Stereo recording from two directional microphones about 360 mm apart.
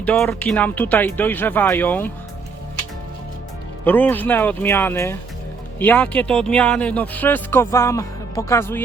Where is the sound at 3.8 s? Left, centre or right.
Centre.